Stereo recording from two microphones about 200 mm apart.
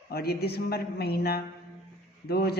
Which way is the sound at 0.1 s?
50° left (ahead or behind).